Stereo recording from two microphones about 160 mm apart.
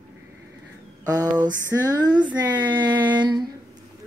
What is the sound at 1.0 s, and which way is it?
Speech, 25° right (ahead or behind).